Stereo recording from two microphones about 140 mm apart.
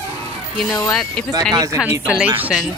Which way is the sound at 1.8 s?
10° right (ahead or behind).